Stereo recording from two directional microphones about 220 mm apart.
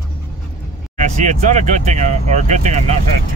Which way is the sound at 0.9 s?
35° right (ahead or behind).